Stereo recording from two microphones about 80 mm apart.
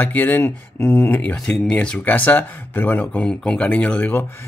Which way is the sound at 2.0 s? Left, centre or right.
Left.